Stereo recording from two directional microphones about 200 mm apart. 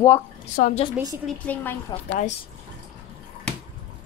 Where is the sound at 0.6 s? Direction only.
40° left (ahead or behind).